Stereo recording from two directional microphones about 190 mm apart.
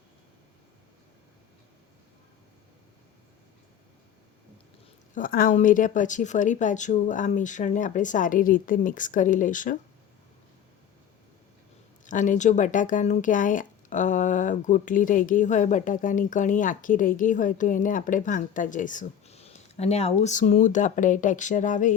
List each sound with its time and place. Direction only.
5.1 s speech: 45° left (ahead or behind)
12.0 s speech: 40° left (ahead or behind)